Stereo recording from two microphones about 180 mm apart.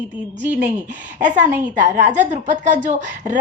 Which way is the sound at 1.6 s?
45° right (ahead or behind).